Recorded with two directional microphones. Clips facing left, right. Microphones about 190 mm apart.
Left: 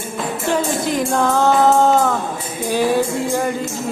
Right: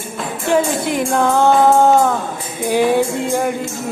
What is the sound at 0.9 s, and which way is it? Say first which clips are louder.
Music: right 1 dB; 15° right (ahead or behind).